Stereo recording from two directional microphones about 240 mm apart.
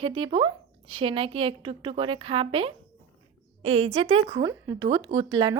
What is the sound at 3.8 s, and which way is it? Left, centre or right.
A woman's voice, right.